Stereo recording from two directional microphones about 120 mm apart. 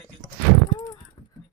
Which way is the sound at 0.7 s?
35° left (ahead or behind).